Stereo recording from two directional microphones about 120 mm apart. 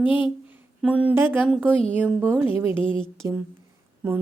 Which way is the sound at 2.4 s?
50° left (ahead or behind).